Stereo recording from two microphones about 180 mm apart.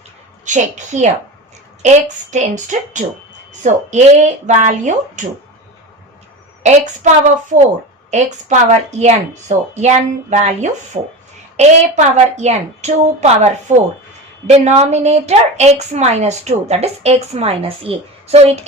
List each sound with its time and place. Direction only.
0.4 s speech: 40° right (ahead or behind)
2.3 s speech: 45° right (ahead or behind)
6.6 s speech: 40° right (ahead or behind)